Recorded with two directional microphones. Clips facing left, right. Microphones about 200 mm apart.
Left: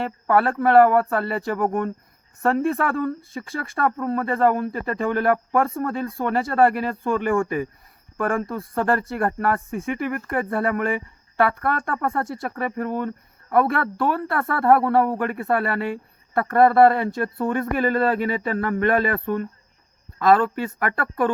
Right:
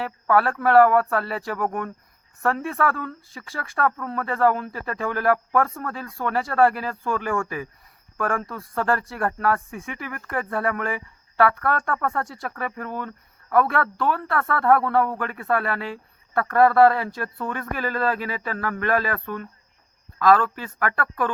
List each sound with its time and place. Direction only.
0.0 s speech: 20° left (ahead or behind)